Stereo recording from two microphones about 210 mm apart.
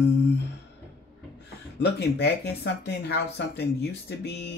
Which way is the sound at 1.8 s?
55° left (ahead or behind).